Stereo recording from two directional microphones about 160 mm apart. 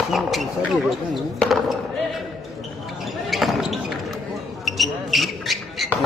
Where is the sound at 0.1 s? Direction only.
Centre (ahead or behind).